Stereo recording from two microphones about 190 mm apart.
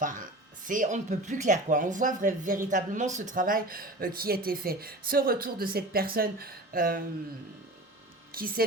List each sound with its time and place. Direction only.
0.0 s speech: 45° right (ahead or behind)
8.3 s speech: 50° right (ahead or behind)